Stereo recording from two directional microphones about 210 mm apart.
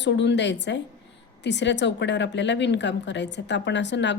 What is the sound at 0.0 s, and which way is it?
A woman's voice, 55° left (ahead or behind).